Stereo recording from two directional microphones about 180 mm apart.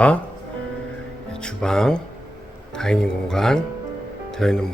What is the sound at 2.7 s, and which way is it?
Speech, 5° left (ahead or behind).